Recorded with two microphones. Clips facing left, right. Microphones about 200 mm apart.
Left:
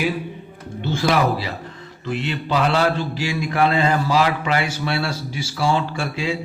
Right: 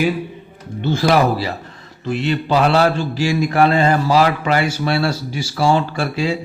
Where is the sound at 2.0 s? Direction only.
40° right (ahead or behind).